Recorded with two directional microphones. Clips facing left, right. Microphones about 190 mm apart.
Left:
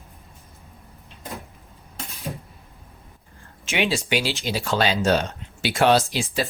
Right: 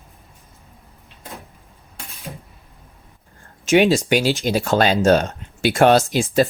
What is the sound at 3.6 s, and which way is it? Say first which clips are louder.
Speech: right 9 dB; 50° right (ahead or behind).